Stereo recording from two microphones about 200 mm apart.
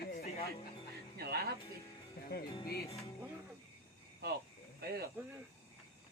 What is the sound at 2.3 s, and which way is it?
Music, 55° left (ahead or behind).